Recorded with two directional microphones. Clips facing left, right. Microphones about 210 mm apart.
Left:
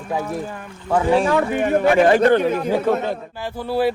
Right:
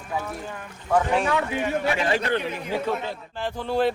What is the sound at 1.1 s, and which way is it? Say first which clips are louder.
Speech: left 6 dB; 40° left (ahead or behind).